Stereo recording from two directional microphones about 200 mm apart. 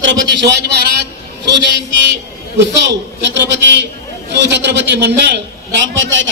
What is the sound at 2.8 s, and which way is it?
A man's voice, 60° right (ahead or behind).